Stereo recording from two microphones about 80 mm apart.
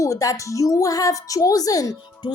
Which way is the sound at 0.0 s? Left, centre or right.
Left.